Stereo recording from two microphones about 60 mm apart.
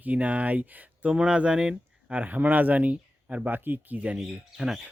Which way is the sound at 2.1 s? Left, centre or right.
Right.